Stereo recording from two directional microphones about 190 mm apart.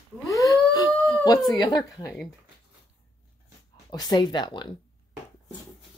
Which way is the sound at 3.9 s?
20° left (ahead or behind).